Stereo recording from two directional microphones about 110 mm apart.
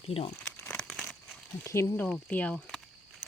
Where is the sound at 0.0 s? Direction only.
65° left (ahead or behind).